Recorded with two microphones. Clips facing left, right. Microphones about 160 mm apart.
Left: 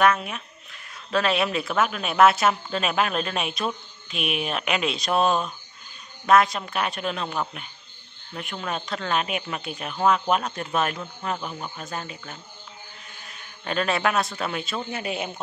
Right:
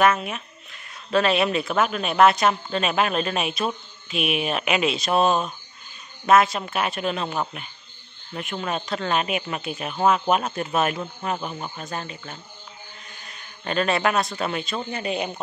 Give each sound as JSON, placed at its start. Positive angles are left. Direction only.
{"t": 0.0, "sound": "a man's voice", "side_deg": -5}